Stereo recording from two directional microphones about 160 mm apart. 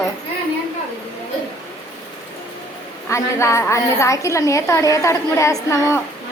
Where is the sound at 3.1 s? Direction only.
15° left (ahead or behind).